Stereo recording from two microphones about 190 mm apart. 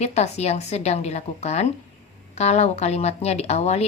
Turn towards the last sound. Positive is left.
turn(degrees=35)  # may be behind; listen again after turning